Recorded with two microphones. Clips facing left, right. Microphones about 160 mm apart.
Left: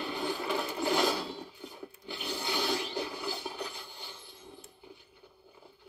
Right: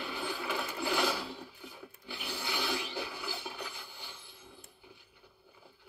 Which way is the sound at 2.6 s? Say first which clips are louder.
Left 4 dB; 40° left (ahead or behind).